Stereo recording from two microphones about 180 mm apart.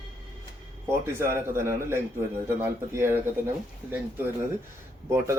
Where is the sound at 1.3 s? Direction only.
15° right (ahead or behind).